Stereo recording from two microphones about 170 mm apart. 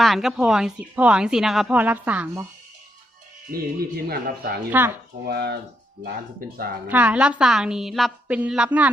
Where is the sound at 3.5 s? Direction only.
65° right (ahead or behind).